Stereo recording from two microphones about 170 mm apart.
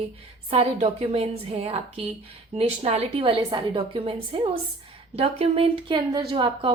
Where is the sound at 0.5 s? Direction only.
35° right (ahead or behind).